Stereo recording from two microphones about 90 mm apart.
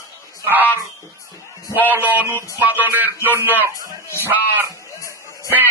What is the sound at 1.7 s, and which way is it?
Speech, 20° right (ahead or behind).